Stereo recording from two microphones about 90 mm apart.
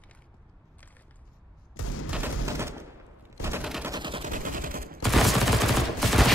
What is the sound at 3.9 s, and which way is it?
Vehicle, 60° right (ahead or behind).